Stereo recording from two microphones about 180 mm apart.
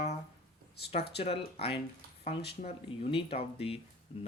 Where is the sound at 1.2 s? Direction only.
35° left (ahead or behind).